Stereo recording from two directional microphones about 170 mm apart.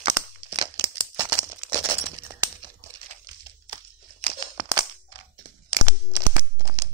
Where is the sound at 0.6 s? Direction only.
25° right (ahead or behind).